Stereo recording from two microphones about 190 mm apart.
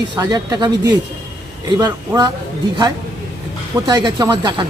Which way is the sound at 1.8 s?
20° right (ahead or behind).